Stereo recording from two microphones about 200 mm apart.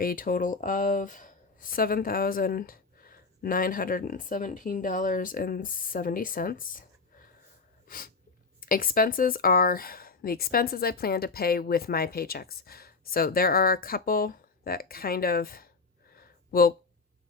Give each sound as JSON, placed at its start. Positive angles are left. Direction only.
{"t": 0.0, "sound": "speech", "side_deg": 45}
{"t": 7.9, "sound": "sneeze", "side_deg": 45}
{"t": 8.6, "sound": "speech", "side_deg": 45}
{"t": 16.1, "sound": "a sound", "side_deg": 50}